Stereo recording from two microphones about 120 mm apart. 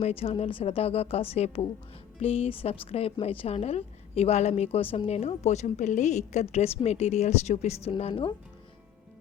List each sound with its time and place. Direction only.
0.0 s a woman's voice: 55° left (ahead or behind)